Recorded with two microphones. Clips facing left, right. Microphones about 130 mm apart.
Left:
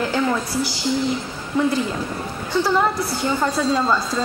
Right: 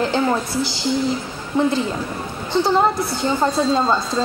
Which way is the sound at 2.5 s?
25° right (ahead or behind).